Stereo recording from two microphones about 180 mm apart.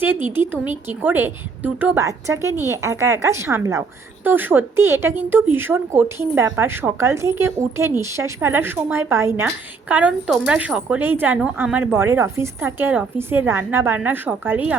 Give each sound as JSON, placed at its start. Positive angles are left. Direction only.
{"t": 0.0, "sound": "a woman's voice", "side_deg": -10}